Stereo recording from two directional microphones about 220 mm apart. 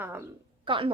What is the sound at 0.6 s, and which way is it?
Speech, 20° right (ahead or behind).